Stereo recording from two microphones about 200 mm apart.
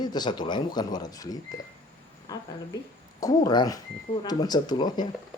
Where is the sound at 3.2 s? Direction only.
20° left (ahead or behind).